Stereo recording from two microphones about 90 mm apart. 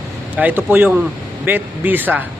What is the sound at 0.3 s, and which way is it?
A man's voice, 20° right (ahead or behind).